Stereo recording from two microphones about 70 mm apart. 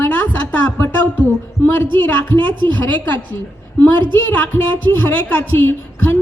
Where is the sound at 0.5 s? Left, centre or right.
Left.